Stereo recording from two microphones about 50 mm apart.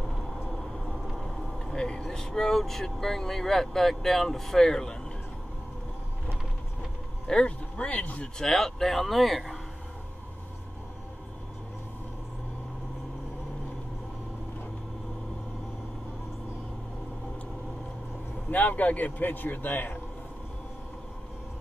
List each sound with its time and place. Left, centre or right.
0.1 s vehicle: centre
2.0 s speech: centre
7.2 s speech: centre
8.4 s speech: centre
18.5 s a man's voice: left